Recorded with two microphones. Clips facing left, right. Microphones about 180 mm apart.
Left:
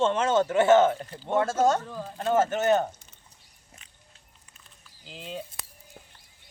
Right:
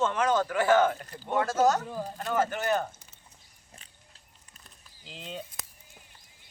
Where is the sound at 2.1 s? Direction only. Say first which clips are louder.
Left 6 dB; 25° left (ahead or behind).